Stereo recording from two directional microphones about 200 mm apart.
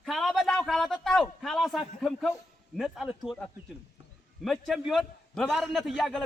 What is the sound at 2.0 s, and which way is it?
A man's voice, centre (ahead or behind).